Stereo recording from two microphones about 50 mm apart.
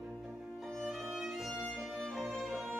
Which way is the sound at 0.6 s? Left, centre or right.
Centre.